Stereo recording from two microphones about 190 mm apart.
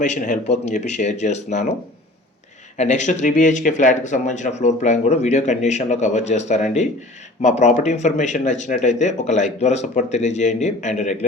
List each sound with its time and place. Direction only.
0.0 s speech: 40° left (ahead or behind)
2.7 s speech: 40° left (ahead or behind)